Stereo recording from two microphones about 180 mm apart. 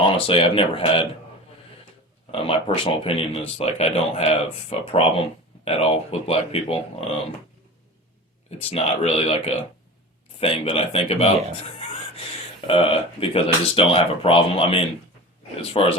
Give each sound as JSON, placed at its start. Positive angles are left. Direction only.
{"t": 0.0, "sound": "speech", "side_deg": 30}
{"t": 2.3, "sound": "speech", "side_deg": 30}
{"t": 8.4, "sound": "speech", "side_deg": 35}
{"t": 12.6, "sound": "speech", "side_deg": 30}